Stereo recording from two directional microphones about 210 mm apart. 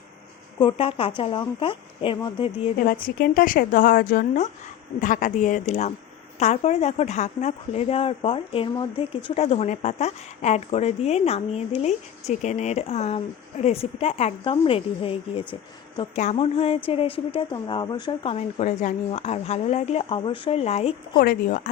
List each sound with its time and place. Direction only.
0.6 s speech: 25° left (ahead or behind)
2.8 s speech: 45° left (ahead or behind)
21.2 s speech: 40° left (ahead or behind)